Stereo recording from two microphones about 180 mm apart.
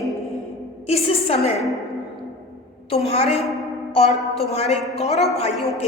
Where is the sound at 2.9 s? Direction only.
35° left (ahead or behind).